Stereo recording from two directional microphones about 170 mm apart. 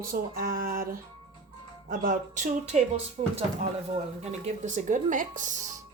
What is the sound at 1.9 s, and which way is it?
Speech, 50° right (ahead or behind).